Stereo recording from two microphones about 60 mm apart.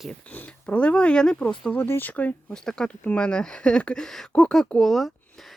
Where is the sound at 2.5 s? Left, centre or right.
Centre.